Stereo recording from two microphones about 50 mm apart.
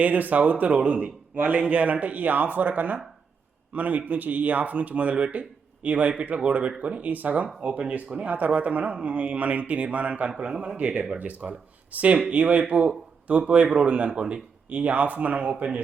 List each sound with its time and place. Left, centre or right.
0.0 s speech: right
0.7 s speech: right